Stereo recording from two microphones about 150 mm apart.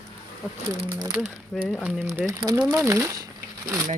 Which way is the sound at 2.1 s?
20° right (ahead or behind).